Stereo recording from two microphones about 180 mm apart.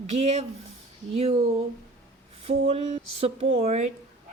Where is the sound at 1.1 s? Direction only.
35° right (ahead or behind).